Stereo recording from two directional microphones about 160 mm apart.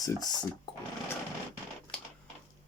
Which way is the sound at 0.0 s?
25° left (ahead or behind).